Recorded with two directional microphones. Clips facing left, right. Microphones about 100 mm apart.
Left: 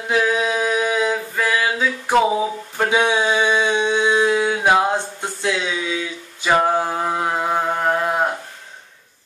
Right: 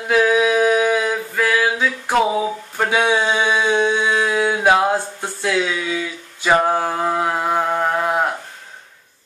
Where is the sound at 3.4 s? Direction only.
10° right (ahead or behind).